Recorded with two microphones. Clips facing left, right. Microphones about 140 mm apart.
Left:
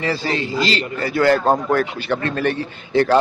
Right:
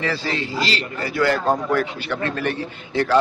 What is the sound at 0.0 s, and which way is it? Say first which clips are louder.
A man's voice: left 3 dB; 35° left (ahead or behind).